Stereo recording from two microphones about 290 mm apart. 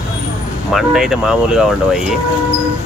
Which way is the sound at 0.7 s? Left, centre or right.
Centre.